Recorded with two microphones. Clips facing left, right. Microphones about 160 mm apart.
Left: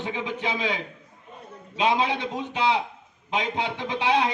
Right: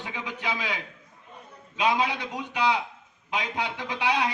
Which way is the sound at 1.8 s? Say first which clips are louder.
Left 2 dB; 25° left (ahead or behind).